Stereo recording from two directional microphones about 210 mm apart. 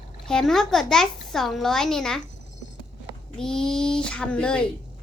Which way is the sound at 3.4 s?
5° left (ahead or behind).